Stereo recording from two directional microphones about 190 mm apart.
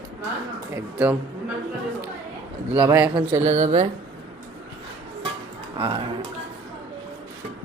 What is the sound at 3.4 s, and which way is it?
Speech, 40° right (ahead or behind).